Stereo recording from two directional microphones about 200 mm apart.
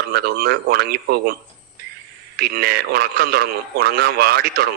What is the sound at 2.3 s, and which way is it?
Speech, 50° right (ahead or behind).